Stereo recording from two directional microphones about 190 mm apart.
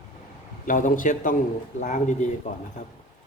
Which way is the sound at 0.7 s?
45° left (ahead or behind).